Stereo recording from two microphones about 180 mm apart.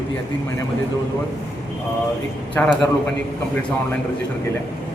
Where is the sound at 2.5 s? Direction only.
5° left (ahead or behind).